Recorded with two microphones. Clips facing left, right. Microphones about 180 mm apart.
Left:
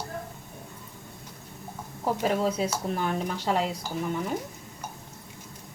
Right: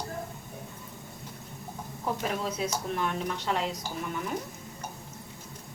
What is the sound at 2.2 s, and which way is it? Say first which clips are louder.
Speech: left 8 dB; 35° left (ahead or behind).